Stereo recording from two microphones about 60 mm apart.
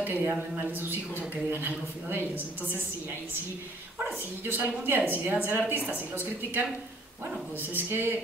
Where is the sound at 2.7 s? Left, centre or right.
Right.